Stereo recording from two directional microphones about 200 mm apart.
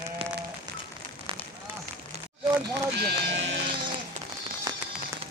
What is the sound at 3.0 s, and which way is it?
Speech, 60° right (ahead or behind).